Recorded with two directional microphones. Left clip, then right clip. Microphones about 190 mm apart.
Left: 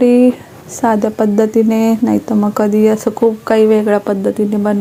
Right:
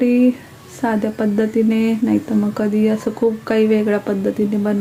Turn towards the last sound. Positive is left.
turn(degrees=5)  # may be behind; listen again after turning